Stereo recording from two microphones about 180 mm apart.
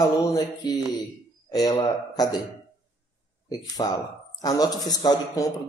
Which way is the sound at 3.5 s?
20° left (ahead or behind).